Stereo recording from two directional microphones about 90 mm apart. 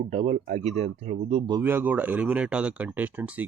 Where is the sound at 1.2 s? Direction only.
90° right.